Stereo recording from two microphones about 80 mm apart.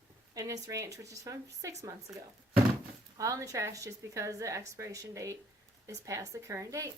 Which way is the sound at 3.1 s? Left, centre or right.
Right.